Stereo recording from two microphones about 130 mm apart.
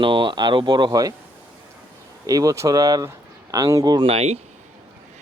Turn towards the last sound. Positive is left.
turn(degrees=-50)  # may be behind; listen again after turning